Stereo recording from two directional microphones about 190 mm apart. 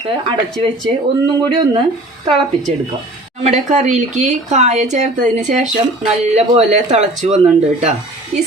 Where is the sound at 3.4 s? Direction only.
40° right (ahead or behind).